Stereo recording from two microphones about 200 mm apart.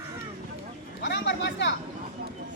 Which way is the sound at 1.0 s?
60° left (ahead or behind).